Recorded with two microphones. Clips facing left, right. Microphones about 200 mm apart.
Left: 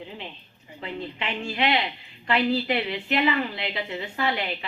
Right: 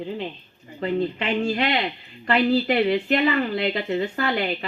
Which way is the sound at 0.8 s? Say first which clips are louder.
Right 9 dB; 40° right (ahead or behind).